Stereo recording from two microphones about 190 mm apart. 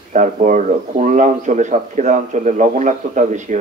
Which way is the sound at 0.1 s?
40° right (ahead or behind).